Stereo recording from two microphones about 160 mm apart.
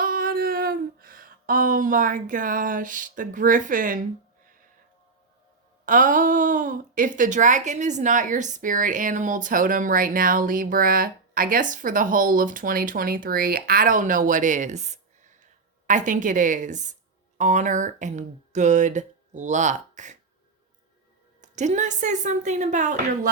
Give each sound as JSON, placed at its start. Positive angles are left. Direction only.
{"t": 0.0, "sound": "a sound", "side_deg": -65}
{"t": 5.8, "sound": "a woman's voice", "side_deg": -55}
{"t": 21.4, "sound": "a woman's voice", "side_deg": -50}